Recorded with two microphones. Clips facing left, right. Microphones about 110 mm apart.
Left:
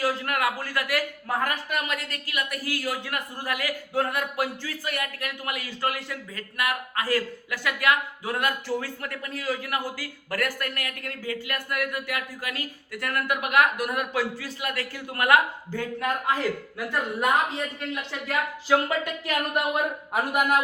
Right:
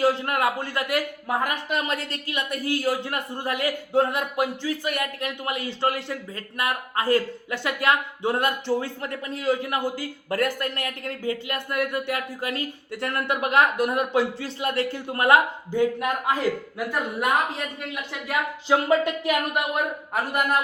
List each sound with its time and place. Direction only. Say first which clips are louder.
0.0 s a man's voice: right 4 dB; 25° right (ahead or behind)